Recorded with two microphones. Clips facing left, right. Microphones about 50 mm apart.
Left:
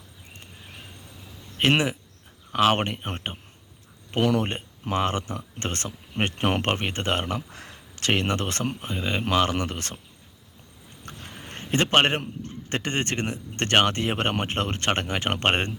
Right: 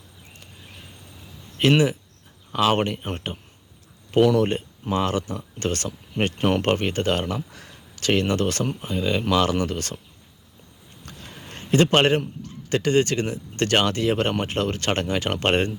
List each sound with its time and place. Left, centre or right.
1.7 s speech: left
6.3 s speech: left
11.0 s a man's voice: left